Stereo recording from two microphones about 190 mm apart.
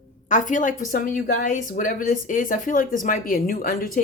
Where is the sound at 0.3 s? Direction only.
40° left (ahead or behind).